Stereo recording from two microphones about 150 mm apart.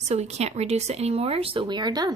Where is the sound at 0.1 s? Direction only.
45° right (ahead or behind); by 2.1 s 25° right (ahead or behind).